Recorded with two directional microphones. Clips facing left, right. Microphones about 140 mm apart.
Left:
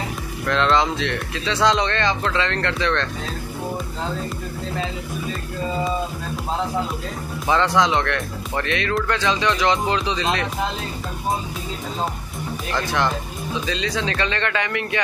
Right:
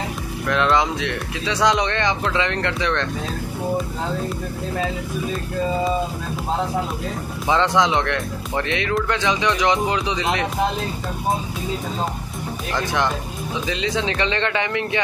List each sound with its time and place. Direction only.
0.5 s speech: 10° right (ahead or behind)
7.4 s speech: 20° right (ahead or behind)
12.7 s speech: 15° right (ahead or behind)